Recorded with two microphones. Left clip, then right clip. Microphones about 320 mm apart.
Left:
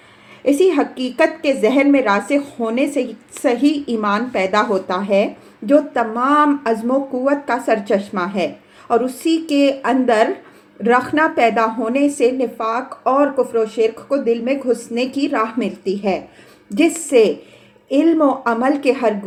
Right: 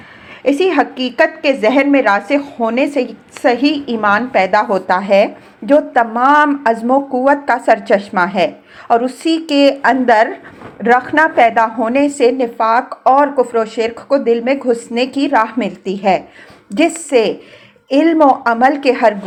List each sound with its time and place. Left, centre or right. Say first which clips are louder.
0.4 s a woman's voice: right 2 dB; centre